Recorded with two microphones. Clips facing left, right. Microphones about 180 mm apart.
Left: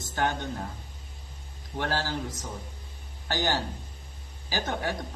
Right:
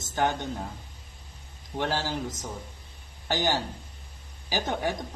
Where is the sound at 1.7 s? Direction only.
15° right (ahead or behind).